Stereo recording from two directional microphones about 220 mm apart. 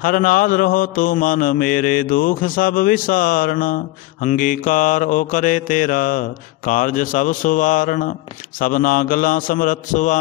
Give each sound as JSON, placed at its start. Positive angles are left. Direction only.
{"t": 0.0, "sound": "mantra", "side_deg": 40}